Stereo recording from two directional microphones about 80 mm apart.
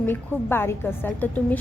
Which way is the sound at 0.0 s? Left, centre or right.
Left.